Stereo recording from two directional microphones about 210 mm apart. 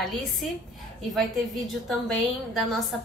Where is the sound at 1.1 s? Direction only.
Centre (ahead or behind).